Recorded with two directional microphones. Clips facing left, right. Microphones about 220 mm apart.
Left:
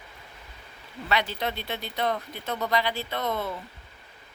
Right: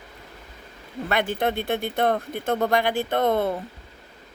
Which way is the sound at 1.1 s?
50° right (ahead or behind).